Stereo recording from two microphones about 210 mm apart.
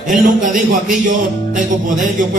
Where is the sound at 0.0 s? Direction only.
40° right (ahead or behind).